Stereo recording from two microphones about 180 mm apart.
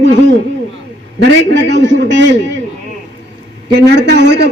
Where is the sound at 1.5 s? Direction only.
75° right (ahead or behind).